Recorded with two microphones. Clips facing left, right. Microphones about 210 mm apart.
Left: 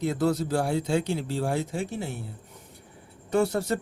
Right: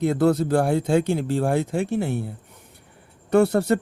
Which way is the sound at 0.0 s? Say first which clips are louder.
Right 6 dB; 55° right (ahead or behind).